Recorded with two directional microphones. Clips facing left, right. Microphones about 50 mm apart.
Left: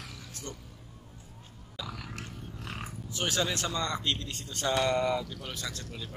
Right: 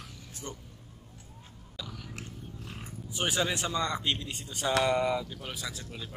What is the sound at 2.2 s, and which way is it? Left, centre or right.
Roaring cats, left.